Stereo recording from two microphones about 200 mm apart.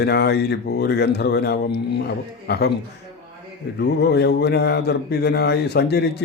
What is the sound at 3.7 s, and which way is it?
Speech, 55° left (ahead or behind).